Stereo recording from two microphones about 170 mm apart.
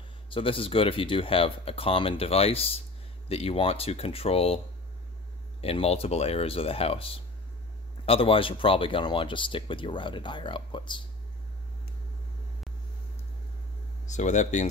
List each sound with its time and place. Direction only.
0.3 s speech: 30° left (ahead or behind)
5.6 s speech: 35° left (ahead or behind)
14.0 s speech: 45° left (ahead or behind)